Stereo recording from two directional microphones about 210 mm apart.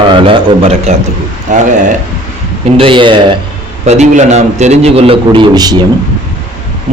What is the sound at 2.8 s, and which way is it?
A man's voice, 25° right (ahead or behind).